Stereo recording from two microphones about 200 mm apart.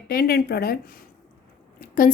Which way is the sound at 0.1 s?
50° left (ahead or behind).